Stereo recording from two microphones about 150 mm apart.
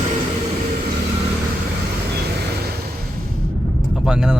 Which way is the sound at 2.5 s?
90° right.